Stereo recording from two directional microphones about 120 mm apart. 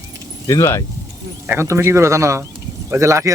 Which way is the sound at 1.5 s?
20° right (ahead or behind).